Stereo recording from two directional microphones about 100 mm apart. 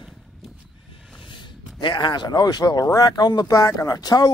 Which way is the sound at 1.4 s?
50° left (ahead or behind).